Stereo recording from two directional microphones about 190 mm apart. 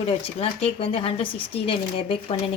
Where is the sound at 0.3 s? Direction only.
30° left (ahead or behind).